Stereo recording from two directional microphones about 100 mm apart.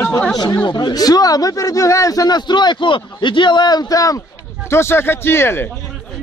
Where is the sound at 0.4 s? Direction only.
45° left (ahead or behind).